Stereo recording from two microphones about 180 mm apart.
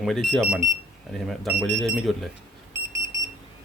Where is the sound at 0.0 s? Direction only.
Centre (ahead or behind).